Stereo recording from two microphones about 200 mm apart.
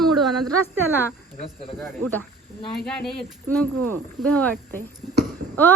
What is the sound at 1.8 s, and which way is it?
Speech, 10° left (ahead or behind).